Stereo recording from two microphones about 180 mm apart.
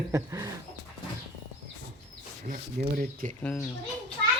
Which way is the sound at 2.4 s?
50° right (ahead or behind).